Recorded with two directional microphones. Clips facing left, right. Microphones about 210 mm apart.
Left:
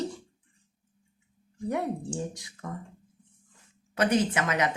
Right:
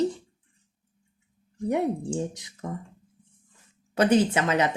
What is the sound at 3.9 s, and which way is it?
Speech, 30° right (ahead or behind).